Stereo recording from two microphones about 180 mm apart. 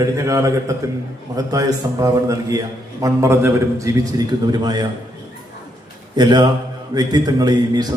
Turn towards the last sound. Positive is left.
turn(degrees=-20)  # may be behind; listen again after turning